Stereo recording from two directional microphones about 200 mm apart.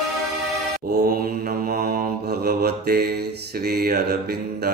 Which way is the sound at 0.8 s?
50° right (ahead or behind).